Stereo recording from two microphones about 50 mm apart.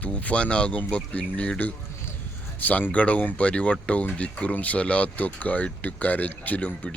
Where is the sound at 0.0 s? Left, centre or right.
Left.